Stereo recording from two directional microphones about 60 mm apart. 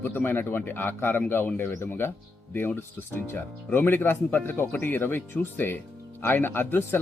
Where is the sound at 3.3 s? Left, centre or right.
Left.